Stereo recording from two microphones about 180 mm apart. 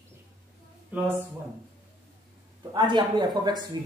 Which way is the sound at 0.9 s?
10° right (ahead or behind).